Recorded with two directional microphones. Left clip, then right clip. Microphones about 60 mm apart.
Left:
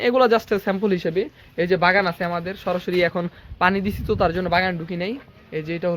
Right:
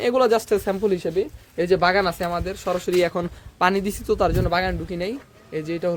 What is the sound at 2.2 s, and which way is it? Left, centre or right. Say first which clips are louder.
Speech: even; right.